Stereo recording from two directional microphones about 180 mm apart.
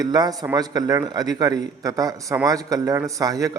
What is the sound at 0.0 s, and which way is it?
A man's voice, 20° right (ahead or behind).